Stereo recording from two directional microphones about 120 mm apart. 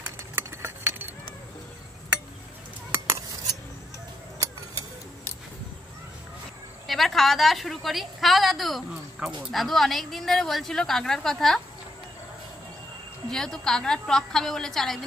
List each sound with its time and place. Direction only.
0.4 s a sound: 20° right (ahead or behind)
6.9 s a woman's voice: centre (ahead or behind)
13.3 s a woman's voice: 5° left (ahead or behind)